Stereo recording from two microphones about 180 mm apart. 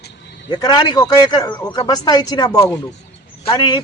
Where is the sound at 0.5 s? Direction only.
20° left (ahead or behind).